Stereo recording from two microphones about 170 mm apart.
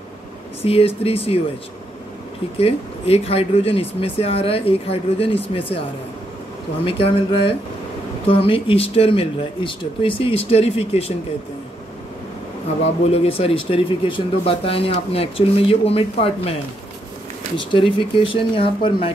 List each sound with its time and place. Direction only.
0.7 s speech: 35° left (ahead or behind)
2.6 s speech: 35° left (ahead or behind)
6.9 s speech: 35° left (ahead or behind)
13.1 s speech: 35° left (ahead or behind)
17.6 s speech: 30° left (ahead or behind)